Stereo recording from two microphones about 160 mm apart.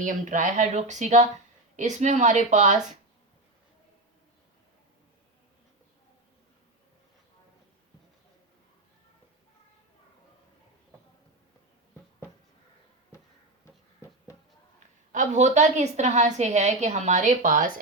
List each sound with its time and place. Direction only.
0.0 s a woman's voice: 55° right (ahead or behind)
15.1 s a woman's voice: 50° right (ahead or behind)